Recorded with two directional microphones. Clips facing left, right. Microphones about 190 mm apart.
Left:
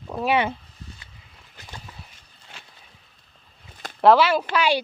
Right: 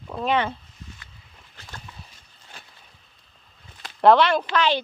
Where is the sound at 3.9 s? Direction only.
5° left (ahead or behind).